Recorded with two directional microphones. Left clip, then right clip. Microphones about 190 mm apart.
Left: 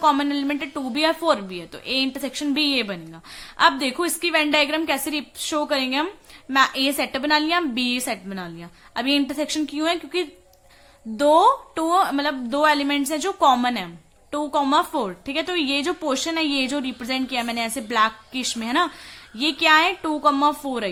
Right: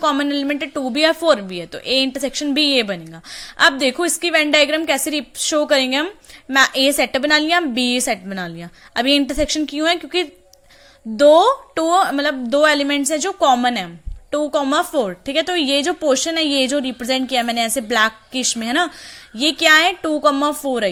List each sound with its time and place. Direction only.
0.0 s a woman's voice: 20° right (ahead or behind)